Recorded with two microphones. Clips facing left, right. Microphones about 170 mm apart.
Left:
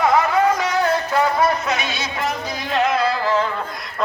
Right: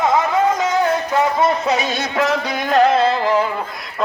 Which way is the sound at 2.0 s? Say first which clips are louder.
Right 6 dB; 80° right.